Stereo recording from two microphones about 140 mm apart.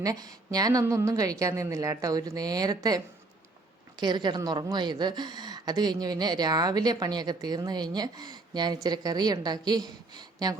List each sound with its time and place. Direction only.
0.0 s a woman's voice: 25° right (ahead or behind)
4.0 s a woman's voice: 30° right (ahead or behind)